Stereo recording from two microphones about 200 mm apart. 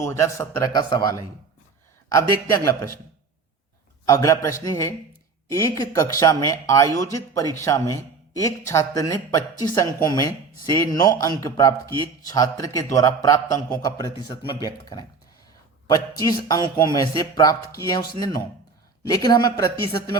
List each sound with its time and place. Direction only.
0.0 s speech: 15° left (ahead or behind)
4.0 s speech: 15° left (ahead or behind)
19.0 s speech: 20° left (ahead or behind)